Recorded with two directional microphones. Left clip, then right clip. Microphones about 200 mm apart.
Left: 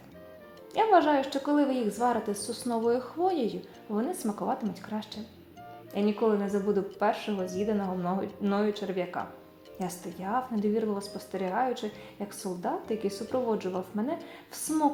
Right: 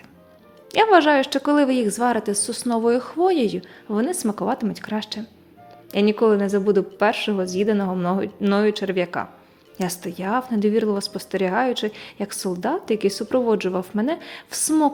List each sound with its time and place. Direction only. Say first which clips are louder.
0.7 s speech: right 8 dB; 30° right (ahead or behind)